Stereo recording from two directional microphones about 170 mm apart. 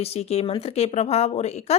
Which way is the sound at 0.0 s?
35° left (ahead or behind).